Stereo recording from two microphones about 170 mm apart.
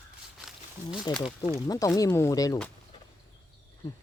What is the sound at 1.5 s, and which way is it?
Speech, 20° left (ahead or behind).